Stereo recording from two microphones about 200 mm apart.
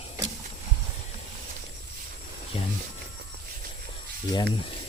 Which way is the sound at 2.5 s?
30° left (ahead or behind).